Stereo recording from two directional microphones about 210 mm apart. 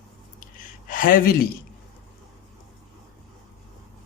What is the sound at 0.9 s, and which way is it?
Speech, 40° left (ahead or behind).